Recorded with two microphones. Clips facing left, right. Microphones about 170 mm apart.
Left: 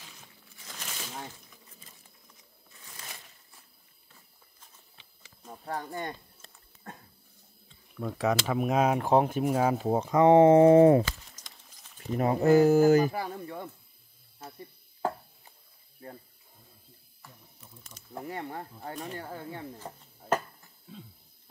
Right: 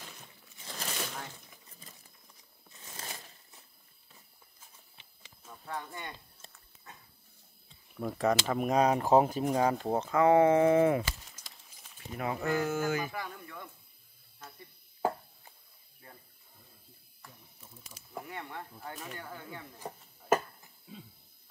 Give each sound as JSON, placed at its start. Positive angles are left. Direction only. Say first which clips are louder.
{"t": 0.7, "sound": "a sound", "louder": "right 4 dB", "side_deg": -35}
{"t": 5.5, "sound": "speech", "louder": "left 5 dB", "side_deg": 40}
{"t": 8.0, "sound": "speech", "louder": "left 1 dB", "side_deg": 0}
{"t": 10.1, "sound": "speech", "louder": "left 5 dB", "side_deg": 25}
{"t": 11.1, "sound": "a sound", "louder": "left 2 dB", "side_deg": -10}
{"t": 12.2, "sound": "speech", "louder": "left 10 dB", "side_deg": 40}
{"t": 16.0, "sound": "a sound", "louder": "left 10 dB", "side_deg": 35}
{"t": 18.0, "sound": "snake", "louder": "left 2 dB", "side_deg": -5}
{"t": 18.3, "sound": "speech", "louder": "left 5 dB", "side_deg": 35}